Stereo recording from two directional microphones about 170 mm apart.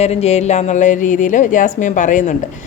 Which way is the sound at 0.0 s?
40° left (ahead or behind).